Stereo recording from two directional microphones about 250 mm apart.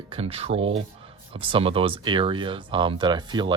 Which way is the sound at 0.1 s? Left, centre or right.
Right.